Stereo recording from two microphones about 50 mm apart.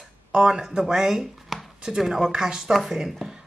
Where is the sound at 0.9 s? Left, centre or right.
Centre.